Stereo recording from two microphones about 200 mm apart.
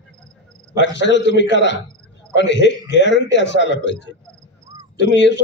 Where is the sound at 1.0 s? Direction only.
60° left (ahead or behind).